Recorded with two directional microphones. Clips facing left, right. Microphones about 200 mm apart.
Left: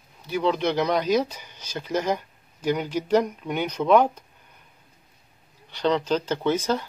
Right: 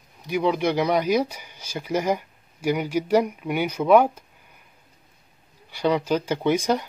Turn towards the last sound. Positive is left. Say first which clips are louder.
# right 2 dB
turn(degrees=-15)  # may be behind; listen again after turning